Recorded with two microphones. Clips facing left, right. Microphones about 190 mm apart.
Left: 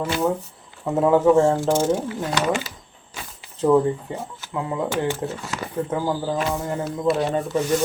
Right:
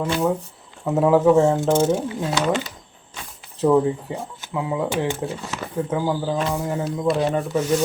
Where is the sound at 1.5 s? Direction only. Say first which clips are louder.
Right 1 dB; 20° right (ahead or behind).